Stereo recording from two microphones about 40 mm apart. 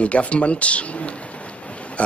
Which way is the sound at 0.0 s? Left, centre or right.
Left.